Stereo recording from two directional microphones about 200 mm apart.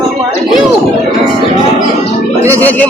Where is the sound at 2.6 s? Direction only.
10° left (ahead or behind).